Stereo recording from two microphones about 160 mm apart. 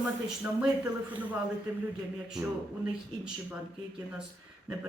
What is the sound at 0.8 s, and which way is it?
Speech, 10° right (ahead or behind).